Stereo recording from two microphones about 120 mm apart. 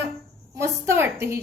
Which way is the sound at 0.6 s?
20° right (ahead or behind).